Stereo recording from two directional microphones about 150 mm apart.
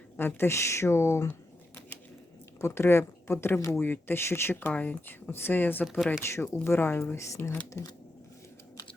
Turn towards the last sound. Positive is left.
turn(degrees=20)  # may be behind; listen again after turning